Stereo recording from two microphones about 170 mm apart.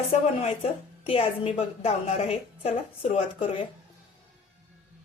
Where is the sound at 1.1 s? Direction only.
35° left (ahead or behind).